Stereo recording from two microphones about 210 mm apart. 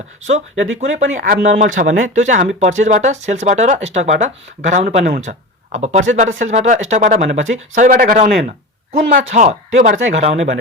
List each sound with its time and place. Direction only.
0.3 s speech: 35° right (ahead or behind)